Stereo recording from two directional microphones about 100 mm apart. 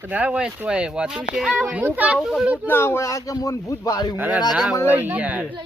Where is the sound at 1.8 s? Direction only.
15° right (ahead or behind).